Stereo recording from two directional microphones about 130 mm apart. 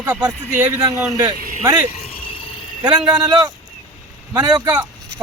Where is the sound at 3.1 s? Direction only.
30° right (ahead or behind).